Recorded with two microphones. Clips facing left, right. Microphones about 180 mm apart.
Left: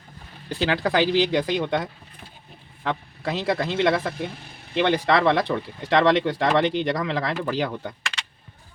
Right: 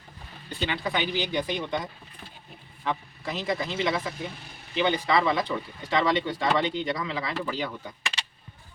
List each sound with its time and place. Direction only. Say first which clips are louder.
0.4 s a man's voice: left 7 dB; 90° left; by 7.9 s 70° left (ahead or behind)